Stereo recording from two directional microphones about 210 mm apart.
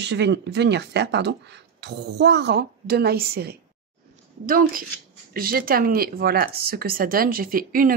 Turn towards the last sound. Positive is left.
turn(degrees=-45)  # may be behind; listen again after turning